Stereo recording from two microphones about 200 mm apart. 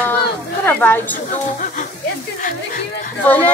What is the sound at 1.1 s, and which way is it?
Speech, 40° left (ahead or behind).